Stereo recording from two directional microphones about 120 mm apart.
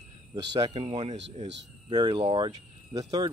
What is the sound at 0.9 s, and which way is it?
Speech, 65° right (ahead or behind).